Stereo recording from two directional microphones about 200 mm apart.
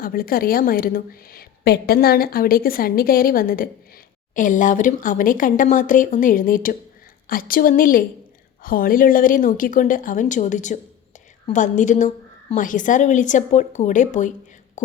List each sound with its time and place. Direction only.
0.0 s a woman's voice: 45° left (ahead or behind)